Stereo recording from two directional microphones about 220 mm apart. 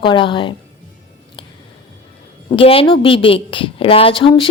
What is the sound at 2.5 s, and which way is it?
A woman's voice, 25° left (ahead or behind).